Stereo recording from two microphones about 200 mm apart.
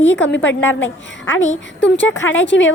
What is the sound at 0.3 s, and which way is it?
Speech, 65° left (ahead or behind).